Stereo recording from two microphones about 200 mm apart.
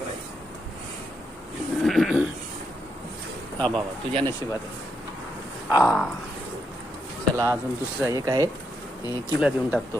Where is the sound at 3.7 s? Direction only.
25° right (ahead or behind).